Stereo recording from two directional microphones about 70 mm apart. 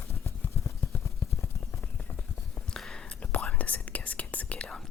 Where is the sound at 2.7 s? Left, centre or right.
Centre.